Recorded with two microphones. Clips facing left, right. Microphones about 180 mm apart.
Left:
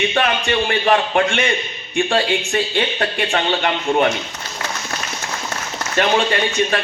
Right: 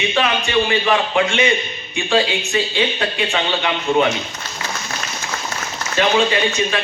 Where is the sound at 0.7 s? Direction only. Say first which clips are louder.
Left 1 dB; 50° left (ahead or behind).